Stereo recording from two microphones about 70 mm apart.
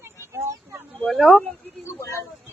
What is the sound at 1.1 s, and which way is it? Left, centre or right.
Speech, centre.